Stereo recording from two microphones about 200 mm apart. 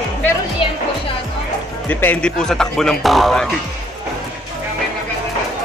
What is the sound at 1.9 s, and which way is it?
Speech, 10° left (ahead or behind).